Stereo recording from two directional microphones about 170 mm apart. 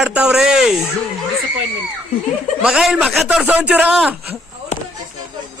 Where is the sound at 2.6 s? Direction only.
5° right (ahead or behind).